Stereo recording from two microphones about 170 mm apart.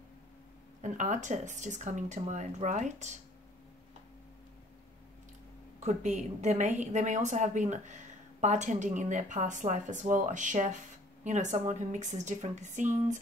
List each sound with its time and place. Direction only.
0.8 s a woman's voice: 45° right (ahead or behind)
5.8 s a woman's voice: 40° right (ahead or behind)